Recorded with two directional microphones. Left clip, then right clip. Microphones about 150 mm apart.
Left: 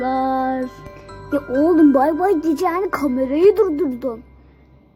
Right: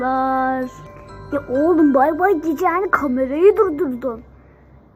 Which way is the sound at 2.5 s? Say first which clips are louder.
Right 2 dB; 20° left (ahead or behind).